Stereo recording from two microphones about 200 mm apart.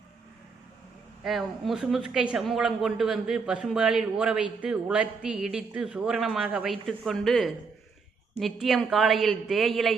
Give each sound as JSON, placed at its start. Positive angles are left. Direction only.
{"t": 1.2, "sound": "a woman's voice", "side_deg": 0}